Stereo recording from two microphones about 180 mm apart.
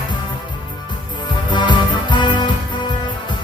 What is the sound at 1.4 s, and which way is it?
Music, 25° left (ahead or behind).